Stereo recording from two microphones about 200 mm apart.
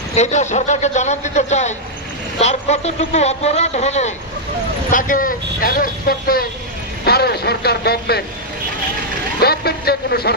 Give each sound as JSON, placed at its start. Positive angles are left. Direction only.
{"t": 0.1, "sound": "speech", "side_deg": 35}
{"t": 9.4, "sound": "speech", "side_deg": 50}